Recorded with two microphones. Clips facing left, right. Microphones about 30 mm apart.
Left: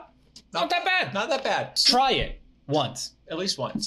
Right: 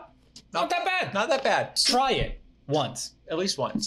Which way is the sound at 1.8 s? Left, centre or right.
Left.